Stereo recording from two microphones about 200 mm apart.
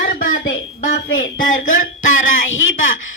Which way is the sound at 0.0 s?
40° left (ahead or behind).